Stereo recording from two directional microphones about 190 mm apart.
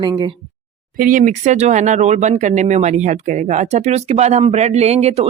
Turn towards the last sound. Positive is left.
turn(degrees=-30)  # may be behind; listen again after turning